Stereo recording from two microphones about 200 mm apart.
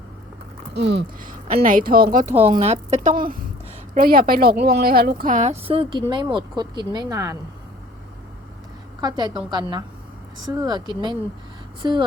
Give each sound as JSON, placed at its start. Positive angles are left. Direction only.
{"t": 0.7, "sound": "a woman's voice", "side_deg": -55}
{"t": 2.3, "sound": "a woman's voice", "side_deg": -30}
{"t": 9.0, "sound": "a woman's voice", "side_deg": -20}